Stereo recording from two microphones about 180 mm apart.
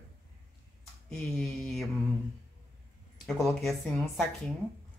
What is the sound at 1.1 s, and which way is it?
Speech, 5° left (ahead or behind).